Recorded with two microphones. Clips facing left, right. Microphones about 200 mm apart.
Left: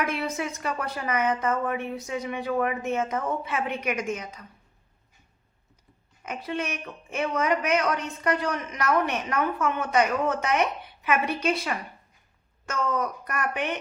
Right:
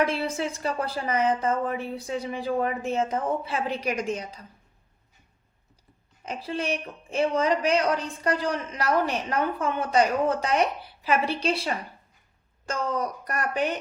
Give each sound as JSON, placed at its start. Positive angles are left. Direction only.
{"t": 0.0, "sound": "a woman's voice", "side_deg": -30}
{"t": 6.2, "sound": "a woman's voice", "side_deg": -30}